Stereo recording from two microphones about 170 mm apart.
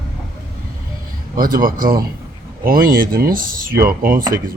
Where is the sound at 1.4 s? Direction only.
55° right (ahead or behind).